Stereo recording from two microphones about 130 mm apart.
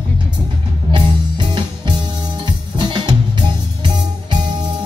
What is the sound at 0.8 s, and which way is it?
Music, 40° right (ahead or behind).